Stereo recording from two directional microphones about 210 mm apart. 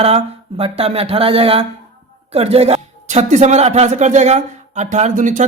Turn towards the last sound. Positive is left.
turn(degrees=-35)  # may be behind; listen again after turning